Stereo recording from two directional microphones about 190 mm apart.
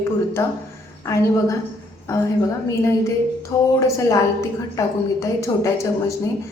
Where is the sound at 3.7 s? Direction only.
15° left (ahead or behind).